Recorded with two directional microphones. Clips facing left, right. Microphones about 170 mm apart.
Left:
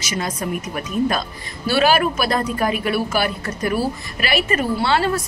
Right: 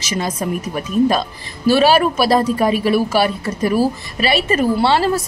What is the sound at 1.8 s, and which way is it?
A woman's voice, 30° right (ahead or behind).